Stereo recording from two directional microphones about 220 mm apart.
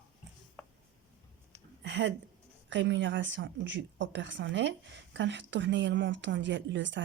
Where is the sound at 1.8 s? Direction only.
55° right (ahead or behind).